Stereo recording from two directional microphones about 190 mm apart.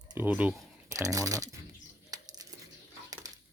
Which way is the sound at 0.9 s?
15° right (ahead or behind).